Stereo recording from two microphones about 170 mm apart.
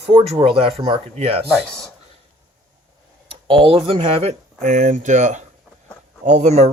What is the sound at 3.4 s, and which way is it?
Speech, 30° right (ahead or behind).